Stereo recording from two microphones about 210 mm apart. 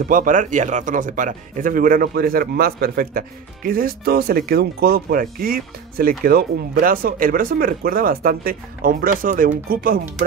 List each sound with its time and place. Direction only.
0.1 s speech: 40° right (ahead or behind)